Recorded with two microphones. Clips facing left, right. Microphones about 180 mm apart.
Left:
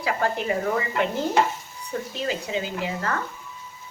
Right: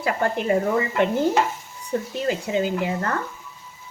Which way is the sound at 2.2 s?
50° right (ahead or behind).